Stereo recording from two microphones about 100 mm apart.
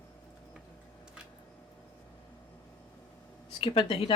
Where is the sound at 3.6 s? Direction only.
65° left (ahead or behind).